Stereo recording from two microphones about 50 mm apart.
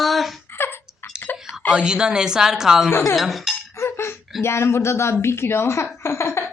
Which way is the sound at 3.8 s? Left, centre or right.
Left.